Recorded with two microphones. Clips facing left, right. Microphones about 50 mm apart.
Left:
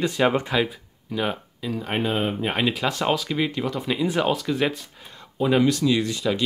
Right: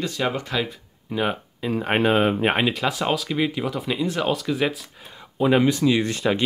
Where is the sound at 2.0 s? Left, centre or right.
Right.